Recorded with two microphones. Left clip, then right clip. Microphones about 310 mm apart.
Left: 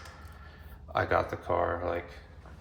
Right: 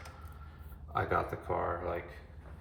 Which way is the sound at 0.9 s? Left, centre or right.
Left.